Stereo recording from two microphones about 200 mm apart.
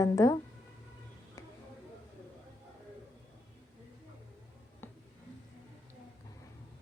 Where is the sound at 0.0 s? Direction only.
15° left (ahead or behind).